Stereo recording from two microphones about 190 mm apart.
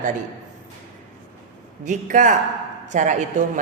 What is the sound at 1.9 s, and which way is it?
A woman's voice, 45° right (ahead or behind).